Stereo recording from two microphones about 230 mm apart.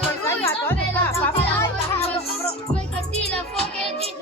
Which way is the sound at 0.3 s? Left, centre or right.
Centre.